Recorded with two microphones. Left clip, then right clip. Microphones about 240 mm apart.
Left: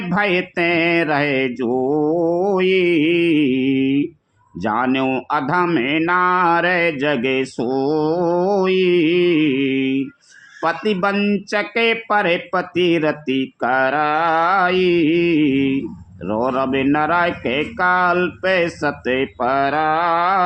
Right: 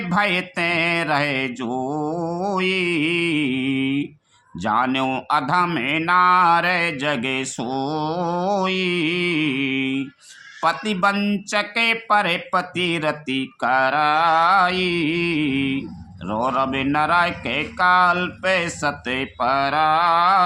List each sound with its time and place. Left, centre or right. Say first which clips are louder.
0.1 s speech: left 2 dB; centre